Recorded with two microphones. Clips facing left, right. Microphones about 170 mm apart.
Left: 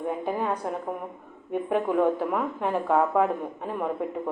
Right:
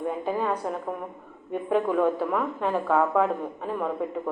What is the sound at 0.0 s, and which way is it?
Speech, 15° left (ahead or behind).